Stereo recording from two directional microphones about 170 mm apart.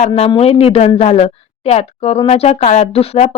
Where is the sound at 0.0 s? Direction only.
35° left (ahead or behind).